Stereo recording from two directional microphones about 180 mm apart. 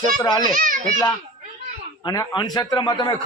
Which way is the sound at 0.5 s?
50° right (ahead or behind).